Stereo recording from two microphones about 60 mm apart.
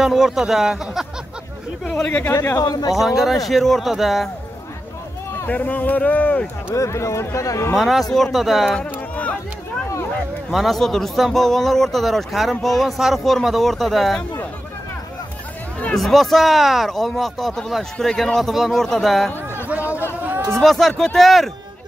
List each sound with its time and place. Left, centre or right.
0.0 s a man's voice: centre
1.9 s speech: centre
2.6 s a man's voice: left
2.9 s a man's voice: centre
5.5 s speech: left
6.7 s speech: left
7.7 s a man's voice: centre
8.7 s a sound: left
10.5 s a man's voice: centre
15.9 s a man's voice: centre
20.5 s a man's voice: centre